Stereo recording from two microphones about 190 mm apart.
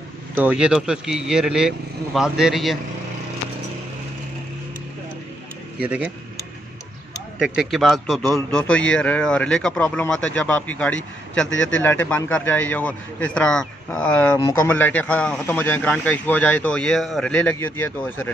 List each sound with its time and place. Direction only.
0.4 s speech: 5° right (ahead or behind)
5.8 s speech: 5° right (ahead or behind)
7.3 s speech: 5° right (ahead or behind)
11.5 s speech: 85° left
12.1 s a man's voice: 5° left (ahead or behind)